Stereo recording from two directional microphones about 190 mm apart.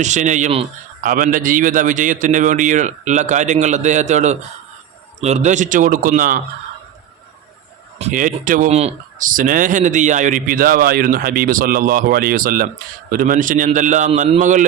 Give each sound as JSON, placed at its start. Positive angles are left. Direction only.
{"t": 0.0, "sound": "a man's voice", "side_deg": -40}
{"t": 7.9, "sound": "a man's voice", "side_deg": -40}